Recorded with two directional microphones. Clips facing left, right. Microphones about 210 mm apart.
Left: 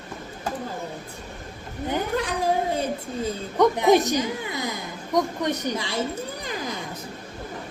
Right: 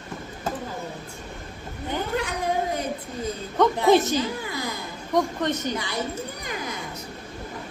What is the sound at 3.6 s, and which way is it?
A woman's voice, 15° left (ahead or behind).